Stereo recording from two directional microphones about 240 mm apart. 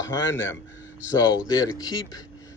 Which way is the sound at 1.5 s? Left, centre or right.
Centre.